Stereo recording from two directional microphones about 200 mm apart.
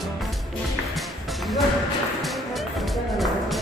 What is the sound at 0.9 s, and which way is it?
Music, centre (ahead or behind).